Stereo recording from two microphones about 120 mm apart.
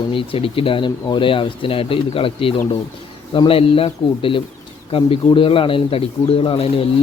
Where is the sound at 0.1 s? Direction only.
50° left (ahead or behind).